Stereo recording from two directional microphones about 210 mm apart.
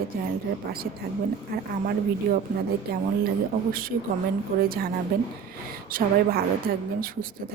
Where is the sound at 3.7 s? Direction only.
45° right (ahead or behind).